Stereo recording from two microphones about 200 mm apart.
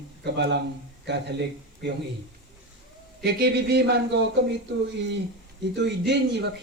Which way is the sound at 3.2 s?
55° right (ahead or behind).